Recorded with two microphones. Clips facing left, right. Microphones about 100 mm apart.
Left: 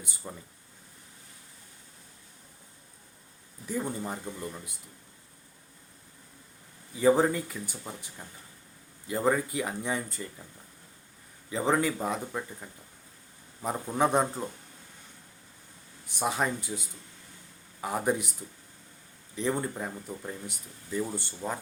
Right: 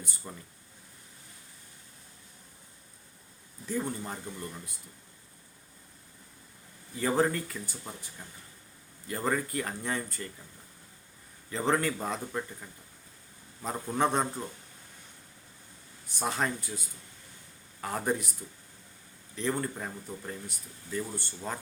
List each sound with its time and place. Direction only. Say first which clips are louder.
0.2 s speech: left 3 dB; 10° left (ahead or behind)
3.7 s speech: left 1 dB; 10° left (ahead or behind)
6.9 s speech: left 4 dB; 15° left (ahead or behind)
11.4 s speech: left 2 dB; 10° left (ahead or behind)
13.6 s speech: left 2 dB; 10° left (ahead or behind)
16.0 s speech: left 2 dB; 15° left (ahead or behind)
19.4 s speech: left 2 dB; 15° left (ahead or behind)